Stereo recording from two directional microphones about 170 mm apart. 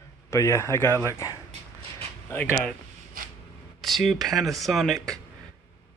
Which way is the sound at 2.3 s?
5° left (ahead or behind).